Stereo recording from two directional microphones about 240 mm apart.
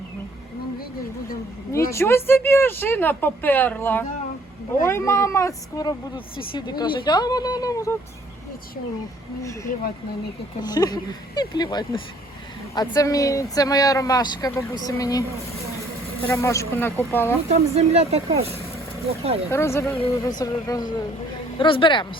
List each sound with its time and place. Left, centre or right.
1.9 s speech: centre
10.6 s speech: centre
16.2 s speech: centre
17.5 s speech: right
19.5 s speech: centre